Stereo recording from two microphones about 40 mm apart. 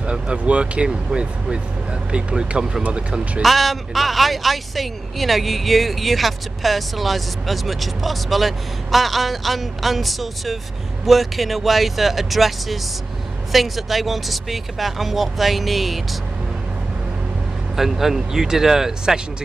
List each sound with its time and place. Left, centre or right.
0.0 s speech: right
3.4 s speech: centre
17.7 s speech: centre